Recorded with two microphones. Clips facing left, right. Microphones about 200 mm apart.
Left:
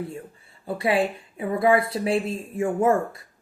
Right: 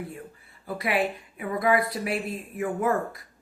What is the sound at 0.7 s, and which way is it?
Speech, 30° left (ahead or behind).